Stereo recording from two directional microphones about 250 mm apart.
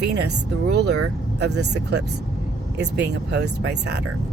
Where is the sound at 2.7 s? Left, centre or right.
Right.